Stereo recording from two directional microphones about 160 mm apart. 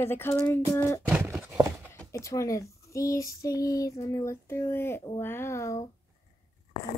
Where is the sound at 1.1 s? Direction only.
5° right (ahead or behind).